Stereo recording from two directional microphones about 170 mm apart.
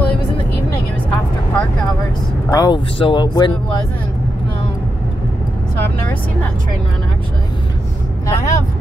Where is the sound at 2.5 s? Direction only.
25° left (ahead or behind).